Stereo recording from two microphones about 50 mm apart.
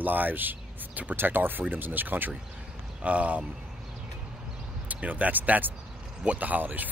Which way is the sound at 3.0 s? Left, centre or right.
Right.